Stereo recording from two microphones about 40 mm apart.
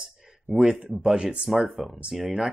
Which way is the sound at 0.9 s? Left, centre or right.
Right.